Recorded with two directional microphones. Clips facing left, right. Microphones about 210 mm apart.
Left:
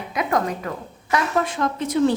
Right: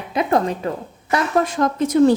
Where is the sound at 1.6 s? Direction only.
40° right (ahead or behind).